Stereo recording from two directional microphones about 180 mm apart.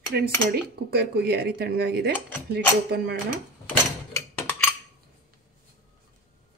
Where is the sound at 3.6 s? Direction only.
10° left (ahead or behind).